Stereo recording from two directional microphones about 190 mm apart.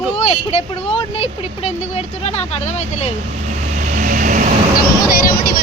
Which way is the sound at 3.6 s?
35° right (ahead or behind).